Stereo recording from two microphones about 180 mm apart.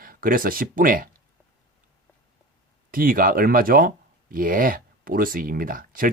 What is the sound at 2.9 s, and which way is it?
Speech, 50° right (ahead or behind).